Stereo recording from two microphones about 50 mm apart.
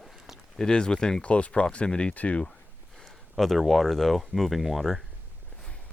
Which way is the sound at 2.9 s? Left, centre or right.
Centre.